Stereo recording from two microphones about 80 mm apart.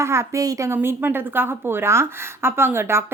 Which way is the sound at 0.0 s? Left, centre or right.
Right.